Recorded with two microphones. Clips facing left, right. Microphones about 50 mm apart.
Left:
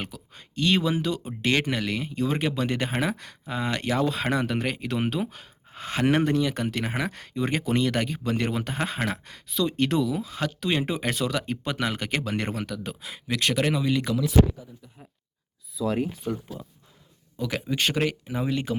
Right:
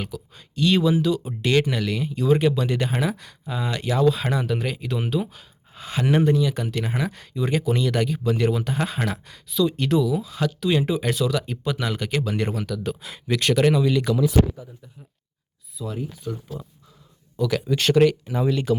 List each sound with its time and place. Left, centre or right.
0.0 s speech: left
9.0 s speech: left
9.2 s speech: left
12.8 s speech: centre
16.1 s speech: left
17.3 s speech: centre